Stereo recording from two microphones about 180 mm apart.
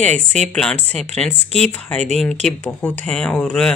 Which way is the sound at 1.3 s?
35° right (ahead or behind).